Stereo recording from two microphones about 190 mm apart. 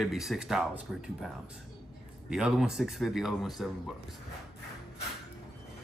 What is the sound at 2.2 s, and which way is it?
Speech, 5° right (ahead or behind).